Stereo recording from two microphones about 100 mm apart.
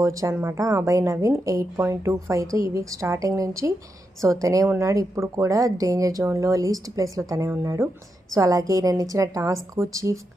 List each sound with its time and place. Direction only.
0.0 s speech: 30° right (ahead or behind)